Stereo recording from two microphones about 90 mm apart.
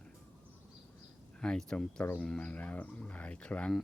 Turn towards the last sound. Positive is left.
turn(degrees=15)  # may be behind; listen again after turning